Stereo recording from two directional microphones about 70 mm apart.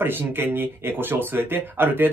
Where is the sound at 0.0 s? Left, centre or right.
Right.